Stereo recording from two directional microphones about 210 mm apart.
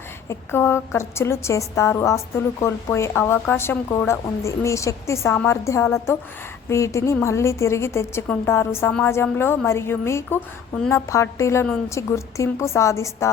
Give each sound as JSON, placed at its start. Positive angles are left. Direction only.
{"t": 0.3, "sound": "a woman's voice", "side_deg": 10}